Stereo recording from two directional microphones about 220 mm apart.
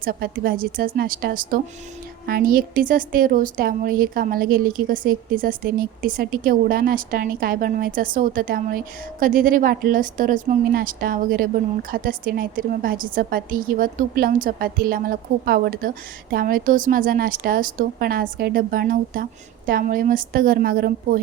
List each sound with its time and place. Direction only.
0.0 s speech: 45° right (ahead or behind)